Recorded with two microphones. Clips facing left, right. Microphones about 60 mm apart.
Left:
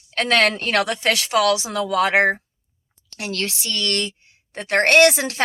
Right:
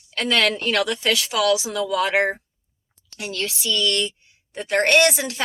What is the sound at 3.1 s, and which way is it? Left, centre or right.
A woman's voice, left.